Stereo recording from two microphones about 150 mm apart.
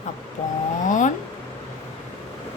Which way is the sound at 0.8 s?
55° left (ahead or behind).